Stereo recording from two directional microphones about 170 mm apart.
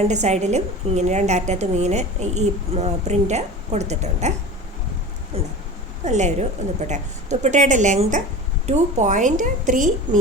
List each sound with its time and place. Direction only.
0.1 s a woman's voice: 40° right (ahead or behind)